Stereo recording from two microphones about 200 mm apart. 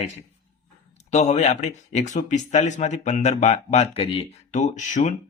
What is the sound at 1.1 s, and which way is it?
Speech, 35° left (ahead or behind).